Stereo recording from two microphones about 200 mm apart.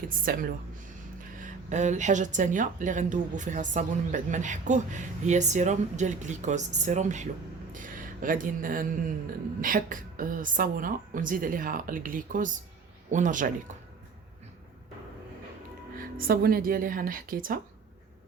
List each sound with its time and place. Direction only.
0.3 s a woman's voice: 45° right (ahead or behind)
16.0 s a woman's voice: 45° right (ahead or behind)